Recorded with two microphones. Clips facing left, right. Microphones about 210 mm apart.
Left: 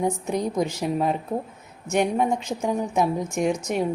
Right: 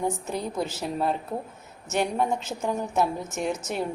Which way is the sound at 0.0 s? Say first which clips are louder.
Left 4 dB; 15° left (ahead or behind).